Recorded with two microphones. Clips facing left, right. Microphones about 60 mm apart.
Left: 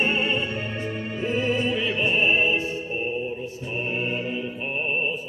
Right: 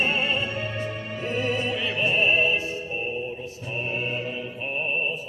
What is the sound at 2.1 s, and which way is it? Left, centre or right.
Music, centre.